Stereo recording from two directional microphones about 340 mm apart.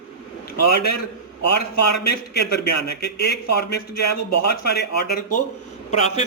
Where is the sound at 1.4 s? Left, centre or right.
Left.